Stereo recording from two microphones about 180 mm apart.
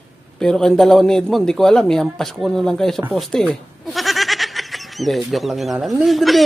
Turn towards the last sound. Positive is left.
turn(degrees=0)  # may be behind; listen again after turning